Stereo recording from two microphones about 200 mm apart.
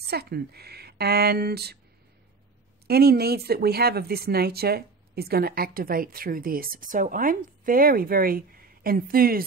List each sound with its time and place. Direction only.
0.1 s speech: 50° right (ahead or behind)
2.9 s speech: 50° right (ahead or behind)